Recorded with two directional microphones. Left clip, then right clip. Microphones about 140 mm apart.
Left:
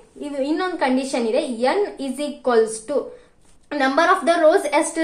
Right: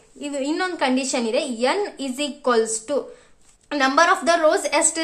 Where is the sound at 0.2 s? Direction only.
25° right (ahead or behind).